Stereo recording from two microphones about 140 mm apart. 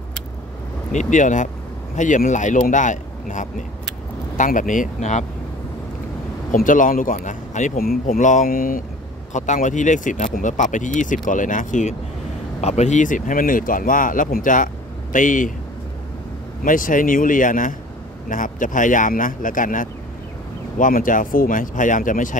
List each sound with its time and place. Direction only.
0.9 s speech: 65° left (ahead or behind)
6.5 s speech: 70° left (ahead or behind); by 8.8 s 90° left
9.3 s speech: 60° left (ahead or behind)
12.5 s speech: 55° left (ahead or behind); by 15.5 s 70° left (ahead or behind)
16.6 s speech: 75° left (ahead or behind)